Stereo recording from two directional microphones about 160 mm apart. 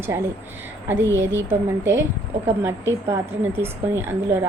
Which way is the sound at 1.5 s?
15° right (ahead or behind).